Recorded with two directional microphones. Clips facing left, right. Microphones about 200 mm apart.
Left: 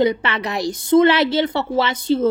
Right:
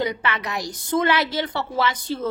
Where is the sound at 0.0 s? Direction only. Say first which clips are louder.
Left 7 dB; 25° left (ahead or behind).